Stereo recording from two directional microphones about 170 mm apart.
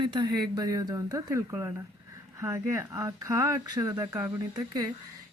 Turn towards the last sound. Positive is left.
turn(degrees=-20)  # may be behind; listen again after turning